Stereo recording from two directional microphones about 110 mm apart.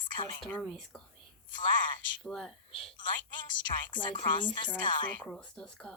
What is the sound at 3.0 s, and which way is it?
A woman's voice, 45° left (ahead or behind).